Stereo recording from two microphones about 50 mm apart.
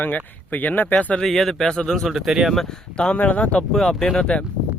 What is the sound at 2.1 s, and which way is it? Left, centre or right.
Speech, centre.